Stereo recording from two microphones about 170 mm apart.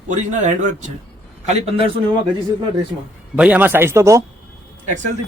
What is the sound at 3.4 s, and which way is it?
Speech, 10° right (ahead or behind).